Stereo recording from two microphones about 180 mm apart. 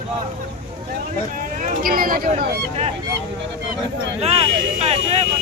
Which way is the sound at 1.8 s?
55° right (ahead or behind).